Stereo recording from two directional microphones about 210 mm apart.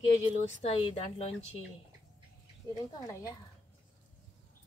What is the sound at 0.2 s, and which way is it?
A woman's voice, 30° left (ahead or behind).